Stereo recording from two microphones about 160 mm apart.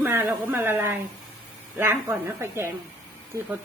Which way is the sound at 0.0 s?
15° right (ahead or behind).